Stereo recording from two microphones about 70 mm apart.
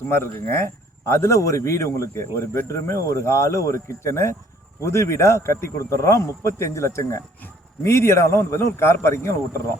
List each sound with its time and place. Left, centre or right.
0.1 s a man's voice: left